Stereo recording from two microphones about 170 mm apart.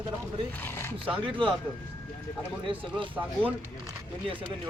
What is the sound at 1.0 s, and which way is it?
Speech, 30° right (ahead or behind).